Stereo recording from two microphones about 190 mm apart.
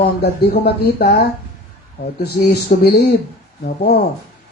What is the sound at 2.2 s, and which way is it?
Speech, 55° left (ahead or behind).